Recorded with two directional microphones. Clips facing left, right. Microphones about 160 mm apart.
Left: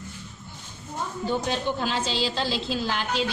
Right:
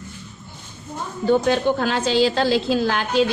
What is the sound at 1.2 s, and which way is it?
A woman's voice, 65° right (ahead or behind).